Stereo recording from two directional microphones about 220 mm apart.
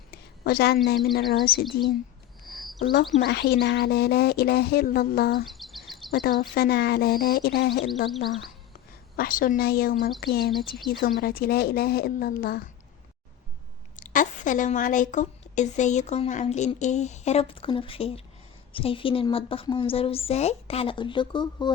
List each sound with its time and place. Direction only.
0.1 s a sound: 45° left (ahead or behind)
0.9 s speech: 45° left (ahead or behind)
2.4 s a sound: centre (ahead or behind)
3.2 s speech: 45° left (ahead or behind)
5.5 s bird: centre (ahead or behind)
6.1 s a woman's voice: 40° left (ahead or behind)
9.1 s a woman's voice: 40° left (ahead or behind)
14.1 s a woman's voice: 35° left (ahead or behind); by 21.7 s 20° left (ahead or behind)